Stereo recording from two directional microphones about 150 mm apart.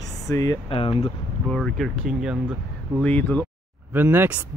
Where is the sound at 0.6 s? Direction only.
35° left (ahead or behind).